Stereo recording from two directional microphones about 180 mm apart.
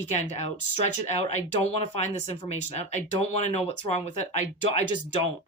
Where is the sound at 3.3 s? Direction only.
35° left (ahead or behind).